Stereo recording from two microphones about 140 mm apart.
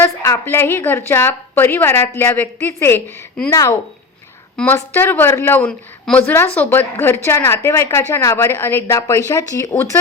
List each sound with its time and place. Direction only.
0.0 s speech: 15° left (ahead or behind)
4.5 s speech: 15° left (ahead or behind)